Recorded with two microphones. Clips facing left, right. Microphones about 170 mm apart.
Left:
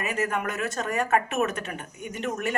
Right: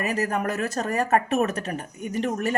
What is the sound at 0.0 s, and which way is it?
Speech, 35° right (ahead or behind).